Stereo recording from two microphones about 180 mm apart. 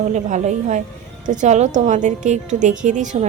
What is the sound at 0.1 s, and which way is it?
A woman's voice, 40° right (ahead or behind).